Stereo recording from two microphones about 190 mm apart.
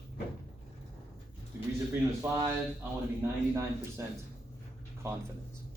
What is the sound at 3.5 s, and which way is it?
Speech, 15° right (ahead or behind).